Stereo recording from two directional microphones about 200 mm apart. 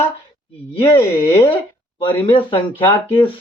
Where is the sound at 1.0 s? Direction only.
10° left (ahead or behind).